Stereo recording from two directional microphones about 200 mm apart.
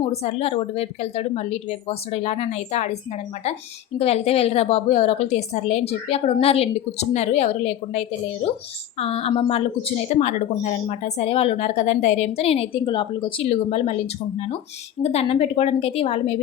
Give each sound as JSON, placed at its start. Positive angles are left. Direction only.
{"t": 0.0, "sound": "a woman's voice", "side_deg": 30}
{"t": 15.0, "sound": "a woman's voice", "side_deg": 30}